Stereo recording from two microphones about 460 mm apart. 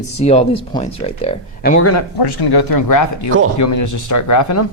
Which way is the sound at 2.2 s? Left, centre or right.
Left.